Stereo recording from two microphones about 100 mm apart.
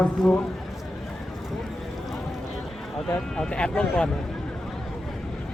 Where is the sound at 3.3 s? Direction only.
10° left (ahead or behind).